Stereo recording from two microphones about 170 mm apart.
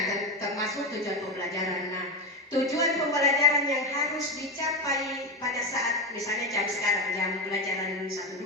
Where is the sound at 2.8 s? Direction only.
Centre (ahead or behind).